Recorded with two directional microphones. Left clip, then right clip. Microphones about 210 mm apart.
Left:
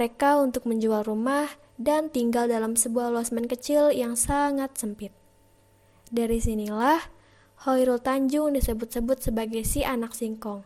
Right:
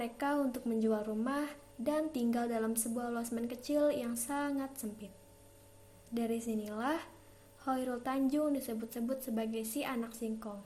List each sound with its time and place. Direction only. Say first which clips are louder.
0.0 s a woman's voice: left 13 dB; 45° left (ahead or behind)
6.1 s a woman's voice: left 10 dB; 45° left (ahead or behind)